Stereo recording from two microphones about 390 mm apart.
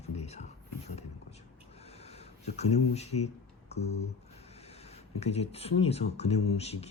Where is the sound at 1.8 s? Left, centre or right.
Centre.